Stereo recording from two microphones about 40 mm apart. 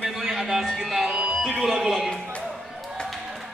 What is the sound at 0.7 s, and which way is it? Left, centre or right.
Music, centre.